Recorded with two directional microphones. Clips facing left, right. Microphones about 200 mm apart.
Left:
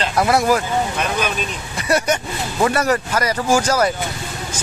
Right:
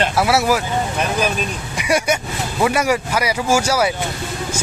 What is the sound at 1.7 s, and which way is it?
Speech, 10° right (ahead or behind).